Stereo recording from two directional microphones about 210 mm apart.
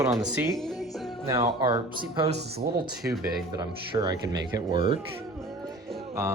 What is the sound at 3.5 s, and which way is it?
Speech, 20° right (ahead or behind).